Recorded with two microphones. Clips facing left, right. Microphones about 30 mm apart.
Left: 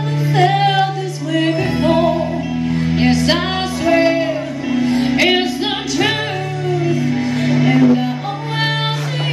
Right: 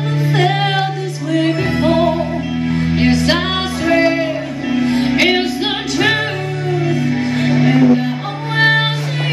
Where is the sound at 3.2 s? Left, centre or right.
Centre.